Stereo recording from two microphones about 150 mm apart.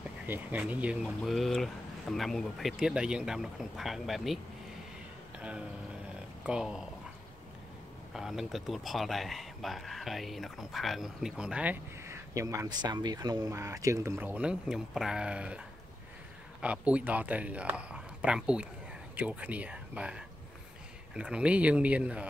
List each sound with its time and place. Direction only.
0.3 s speech: 10° right (ahead or behind)
5.4 s a sound: 5° right (ahead or behind)
6.4 s speech: 5° right (ahead or behind)
8.1 s speech: centre (ahead or behind)
16.6 s speech: 10° right (ahead or behind)